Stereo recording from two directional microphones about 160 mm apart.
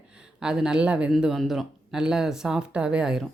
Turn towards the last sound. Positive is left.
turn(degrees=-5)  # may be behind; listen again after turning